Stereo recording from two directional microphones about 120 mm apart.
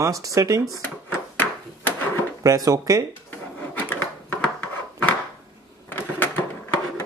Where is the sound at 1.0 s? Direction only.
15° left (ahead or behind).